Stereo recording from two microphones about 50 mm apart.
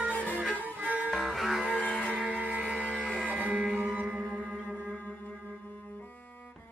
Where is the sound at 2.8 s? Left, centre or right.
Centre.